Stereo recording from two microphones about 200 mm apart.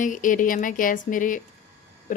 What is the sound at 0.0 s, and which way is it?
Speech, 40° left (ahead or behind).